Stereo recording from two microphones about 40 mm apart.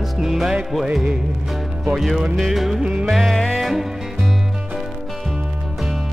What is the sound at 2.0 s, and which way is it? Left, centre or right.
Music, centre.